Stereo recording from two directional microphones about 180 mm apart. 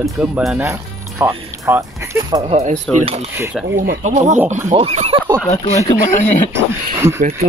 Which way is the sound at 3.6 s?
5° right (ahead or behind).